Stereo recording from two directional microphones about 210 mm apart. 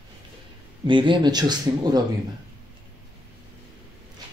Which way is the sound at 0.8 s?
25° right (ahead or behind).